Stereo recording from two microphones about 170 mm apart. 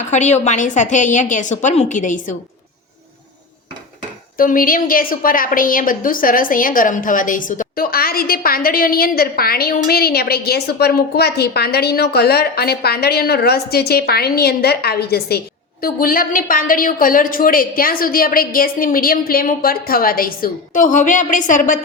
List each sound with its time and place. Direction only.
0.1 s a woman's voice: 45° left (ahead or behind)
4.4 s a woman's voice: 55° left (ahead or behind)
15.8 s a woman's voice: 55° left (ahead or behind)